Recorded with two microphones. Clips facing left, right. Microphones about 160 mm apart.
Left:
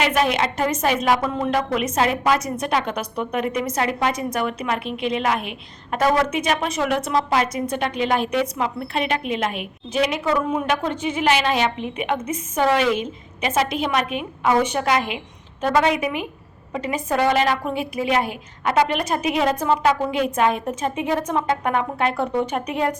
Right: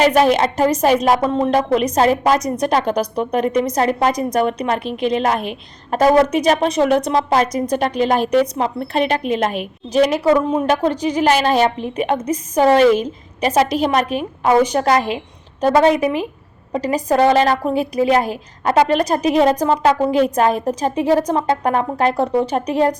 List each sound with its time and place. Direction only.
0.0 s a woman's voice: 35° right (ahead or behind)
10.3 s a woman's voice: 30° right (ahead or behind)